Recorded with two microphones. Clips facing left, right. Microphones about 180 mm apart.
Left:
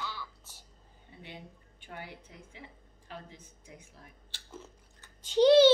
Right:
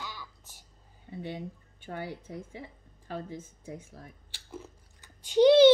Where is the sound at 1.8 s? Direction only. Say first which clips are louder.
Right 8 dB; 40° right (ahead or behind).